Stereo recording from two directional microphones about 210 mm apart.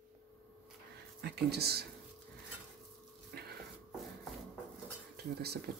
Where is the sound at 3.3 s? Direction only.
50° right (ahead or behind).